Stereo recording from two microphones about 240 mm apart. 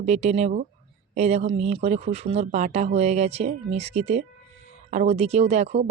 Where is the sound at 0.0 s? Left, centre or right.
Right.